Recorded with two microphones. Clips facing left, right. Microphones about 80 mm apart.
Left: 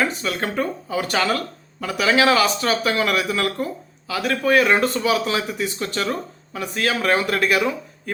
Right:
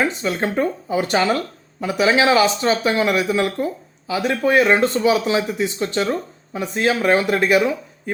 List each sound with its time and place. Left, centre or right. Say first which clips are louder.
0.0 s speech: right 2 dB; right